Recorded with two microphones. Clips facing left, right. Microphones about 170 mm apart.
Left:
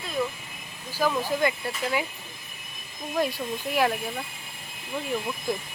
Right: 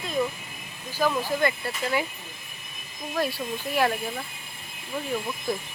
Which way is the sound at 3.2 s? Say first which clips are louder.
Left 1 dB; 15° left (ahead or behind).